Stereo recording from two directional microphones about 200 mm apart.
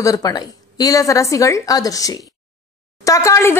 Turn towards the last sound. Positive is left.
turn(degrees=15)  # may be behind; listen again after turning